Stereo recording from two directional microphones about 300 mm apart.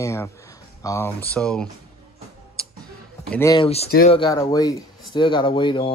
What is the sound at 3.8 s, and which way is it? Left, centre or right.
Speech, left.